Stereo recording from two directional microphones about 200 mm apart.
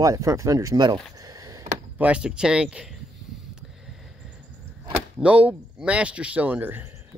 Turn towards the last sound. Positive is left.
turn(degrees=-10)  # may be behind; listen again after turning